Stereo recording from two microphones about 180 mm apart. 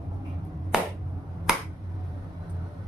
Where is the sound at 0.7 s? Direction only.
5° right (ahead or behind).